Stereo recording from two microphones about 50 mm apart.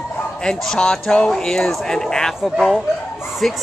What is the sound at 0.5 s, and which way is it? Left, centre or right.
Speech, centre.